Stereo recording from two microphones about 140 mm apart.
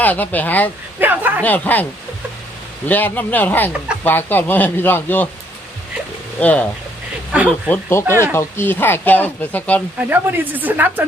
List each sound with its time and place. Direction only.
0.0 s speech: 10° left (ahead or behind)
0.9 s speech: 15° right (ahead or behind)
1.4 s speech: 10° left (ahead or behind)
6.4 s speech: 10° left (ahead or behind)
7.3 s a woman's voice: 10° right (ahead or behind)
7.7 s speech: 20° left (ahead or behind)
10.1 s a woman's voice: 15° right (ahead or behind)